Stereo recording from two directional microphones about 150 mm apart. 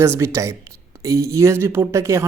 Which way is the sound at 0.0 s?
15° right (ahead or behind).